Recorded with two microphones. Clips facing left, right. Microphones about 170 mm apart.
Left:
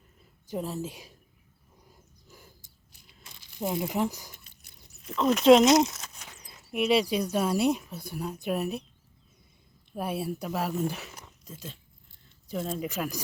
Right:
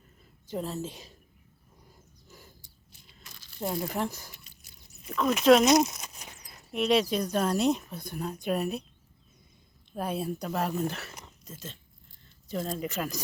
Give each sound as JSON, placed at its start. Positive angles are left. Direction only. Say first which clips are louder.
{"t": 0.4, "sound": "speech", "louder": "left 1 dB", "side_deg": 10}
{"t": 2.2, "sound": "a sound", "louder": "right 1 dB", "side_deg": 10}
{"t": 3.2, "sound": "speech", "louder": "left 2 dB", "side_deg": 20}
{"t": 5.5, "sound": "speech", "louder": "left 2 dB", "side_deg": 25}
{"t": 5.9, "sound": "a sound", "louder": "right 1 dB", "side_deg": -15}
{"t": 6.7, "sound": "speech", "louder": "left 1 dB", "side_deg": 10}
{"t": 9.9, "sound": "speech", "louder": "even", "side_deg": 5}